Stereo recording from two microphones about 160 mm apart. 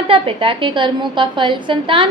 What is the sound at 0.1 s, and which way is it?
A woman's voice, 35° right (ahead or behind).